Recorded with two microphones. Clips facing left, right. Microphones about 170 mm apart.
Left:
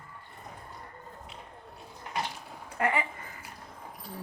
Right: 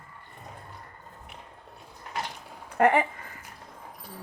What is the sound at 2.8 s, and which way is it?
Speech, 50° right (ahead or behind).